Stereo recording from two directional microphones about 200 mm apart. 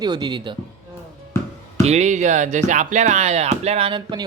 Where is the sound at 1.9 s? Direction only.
35° right (ahead or behind).